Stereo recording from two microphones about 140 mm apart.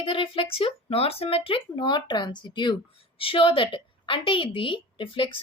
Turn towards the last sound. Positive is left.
turn(degrees=40)  # may be behind; listen again after turning